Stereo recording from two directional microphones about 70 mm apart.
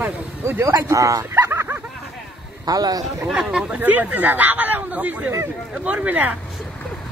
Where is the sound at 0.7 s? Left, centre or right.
Right.